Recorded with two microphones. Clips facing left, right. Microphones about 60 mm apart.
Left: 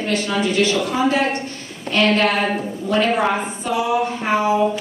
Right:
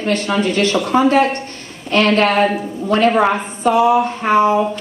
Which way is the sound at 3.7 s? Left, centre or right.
Right.